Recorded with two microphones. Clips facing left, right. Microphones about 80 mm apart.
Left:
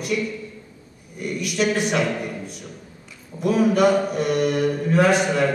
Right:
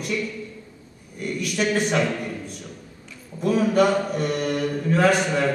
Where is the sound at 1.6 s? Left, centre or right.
Centre.